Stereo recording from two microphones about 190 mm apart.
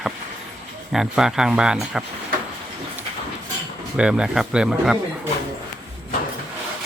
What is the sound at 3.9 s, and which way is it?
Speech, 5° right (ahead or behind).